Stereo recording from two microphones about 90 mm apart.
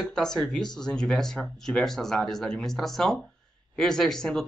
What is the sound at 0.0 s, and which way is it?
Speech, 5° left (ahead or behind).